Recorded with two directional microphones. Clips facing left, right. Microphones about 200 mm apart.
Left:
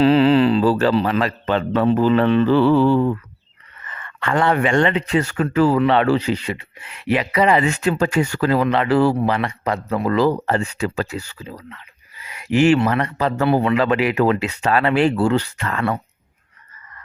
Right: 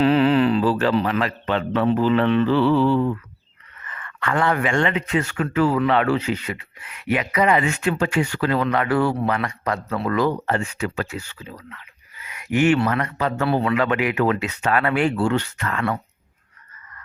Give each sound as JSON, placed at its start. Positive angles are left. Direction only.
{"t": 0.0, "sound": "a man's voice", "side_deg": 30}
{"t": 3.8, "sound": "speech", "side_deg": 30}
{"t": 10.1, "sound": "speech", "side_deg": 30}
{"t": 13.4, "sound": "speech", "side_deg": 20}